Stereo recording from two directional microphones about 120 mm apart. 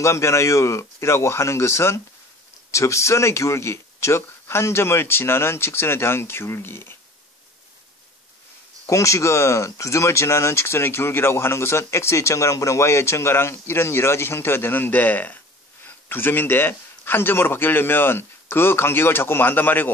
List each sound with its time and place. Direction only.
0.0 s speech: 25° left (ahead or behind)
8.8 s speech: 25° left (ahead or behind)